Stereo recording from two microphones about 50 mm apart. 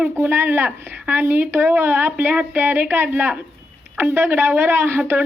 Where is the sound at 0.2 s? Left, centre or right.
Right.